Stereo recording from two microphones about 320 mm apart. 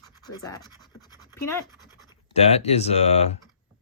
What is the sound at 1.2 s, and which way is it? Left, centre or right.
Speech, centre.